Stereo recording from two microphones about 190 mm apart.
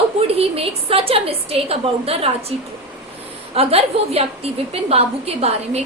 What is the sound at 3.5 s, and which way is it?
A woman's voice, 30° right (ahead or behind).